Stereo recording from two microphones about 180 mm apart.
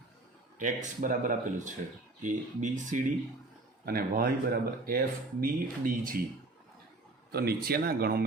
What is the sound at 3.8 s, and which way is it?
Speech, 55° right (ahead or behind).